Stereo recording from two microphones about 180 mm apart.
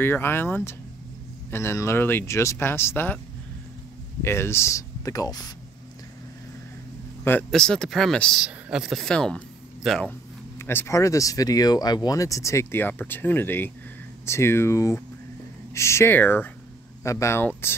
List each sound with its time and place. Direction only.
0.0 s speech: 10° left (ahead or behind)
4.2 s speech: 15° left (ahead or behind)
7.2 s speech: 5° left (ahead or behind)